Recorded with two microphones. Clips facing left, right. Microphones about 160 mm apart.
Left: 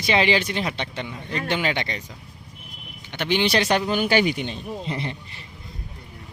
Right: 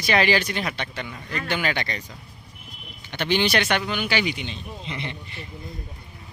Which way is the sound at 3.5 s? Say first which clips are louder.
Left 3 dB; 30° left (ahead or behind).